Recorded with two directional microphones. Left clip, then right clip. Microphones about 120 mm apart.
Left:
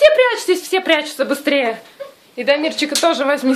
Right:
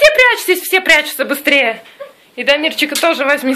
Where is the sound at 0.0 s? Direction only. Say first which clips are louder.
Right 2 dB; 5° left (ahead or behind).